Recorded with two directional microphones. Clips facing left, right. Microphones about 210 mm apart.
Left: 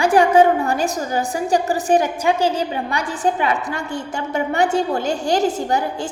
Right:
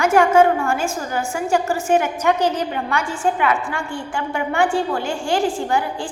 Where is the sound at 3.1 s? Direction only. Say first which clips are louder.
Left 1 dB; 35° left (ahead or behind).